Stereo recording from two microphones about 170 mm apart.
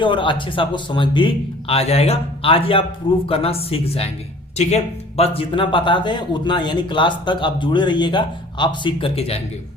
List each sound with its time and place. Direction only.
0.0 s speech: 30° left (ahead or behind)